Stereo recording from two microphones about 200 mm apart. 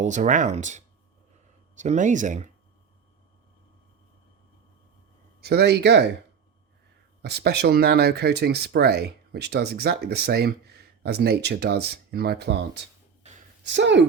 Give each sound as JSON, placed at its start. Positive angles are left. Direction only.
{"t": 0.0, "sound": "speech", "side_deg": -35}
{"t": 5.4, "sound": "speech", "side_deg": -50}
{"t": 7.2, "sound": "speech", "side_deg": -55}